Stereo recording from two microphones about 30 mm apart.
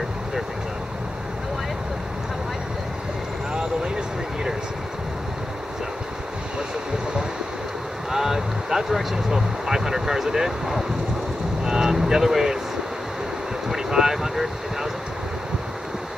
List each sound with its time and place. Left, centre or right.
3.5 s vehicle: right
8.1 s vehicle: centre
13.7 s boat: centre